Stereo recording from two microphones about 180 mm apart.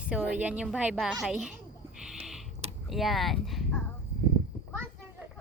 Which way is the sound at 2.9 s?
Centre (ahead or behind).